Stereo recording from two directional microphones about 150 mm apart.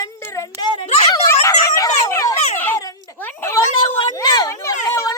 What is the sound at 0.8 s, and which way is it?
Speech, 45° left (ahead or behind).